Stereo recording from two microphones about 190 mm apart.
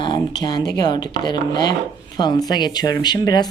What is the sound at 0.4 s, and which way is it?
Speech, 20° left (ahead or behind).